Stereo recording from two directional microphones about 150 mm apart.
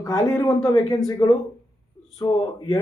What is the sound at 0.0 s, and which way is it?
Speech, 25° left (ahead or behind).